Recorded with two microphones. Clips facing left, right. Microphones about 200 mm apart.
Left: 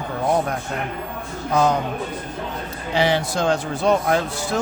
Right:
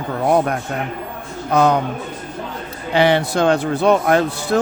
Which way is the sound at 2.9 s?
60° right (ahead or behind).